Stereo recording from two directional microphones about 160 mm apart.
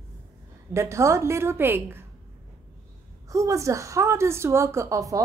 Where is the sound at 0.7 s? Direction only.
20° right (ahead or behind).